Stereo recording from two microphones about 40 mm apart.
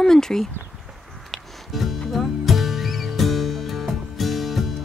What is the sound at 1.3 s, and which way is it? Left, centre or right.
Music, centre.